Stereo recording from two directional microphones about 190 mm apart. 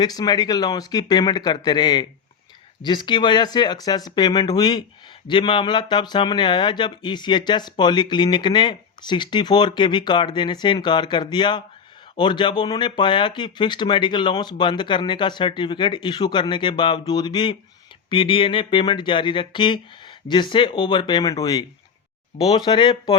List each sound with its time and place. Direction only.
0.0 s a man's voice: 20° left (ahead or behind)